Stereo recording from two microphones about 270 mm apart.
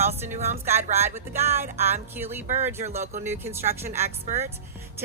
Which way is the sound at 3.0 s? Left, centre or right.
Right.